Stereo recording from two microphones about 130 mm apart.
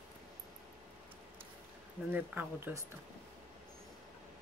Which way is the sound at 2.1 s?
15° right (ahead or behind).